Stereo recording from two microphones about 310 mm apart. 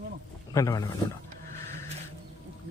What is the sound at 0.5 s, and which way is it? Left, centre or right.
Speech, centre.